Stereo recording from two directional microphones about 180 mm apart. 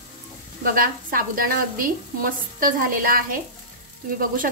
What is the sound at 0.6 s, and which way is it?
Speech, 50° right (ahead or behind).